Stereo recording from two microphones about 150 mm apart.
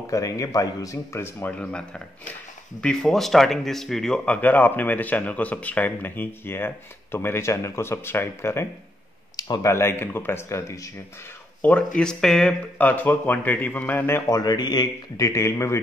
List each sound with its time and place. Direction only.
0.0 s speech: 20° left (ahead or behind)
11.6 s speech: 10° left (ahead or behind)